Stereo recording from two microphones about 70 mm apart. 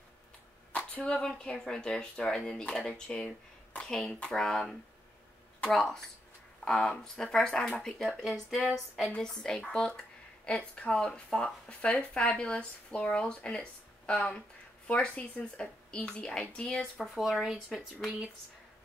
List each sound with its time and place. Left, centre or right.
0.7 s speech: centre
8.1 s speech: centre
9.7 s a sound: centre
10.7 s speech: centre
17.0 s speech: centre